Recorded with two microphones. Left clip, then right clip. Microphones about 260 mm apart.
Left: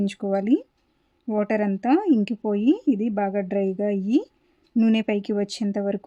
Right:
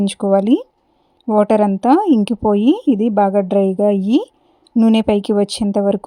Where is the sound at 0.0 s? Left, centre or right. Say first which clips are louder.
Right 10 dB; right.